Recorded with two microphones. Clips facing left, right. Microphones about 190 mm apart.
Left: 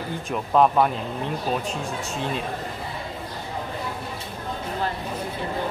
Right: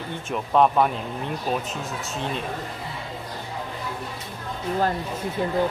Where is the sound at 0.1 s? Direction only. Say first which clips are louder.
Even; centre (ahead or behind).